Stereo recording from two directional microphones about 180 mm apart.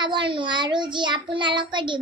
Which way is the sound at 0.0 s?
25° right (ahead or behind).